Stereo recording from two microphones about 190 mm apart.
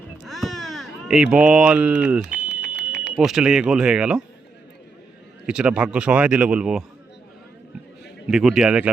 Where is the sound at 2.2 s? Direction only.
65° left (ahead or behind).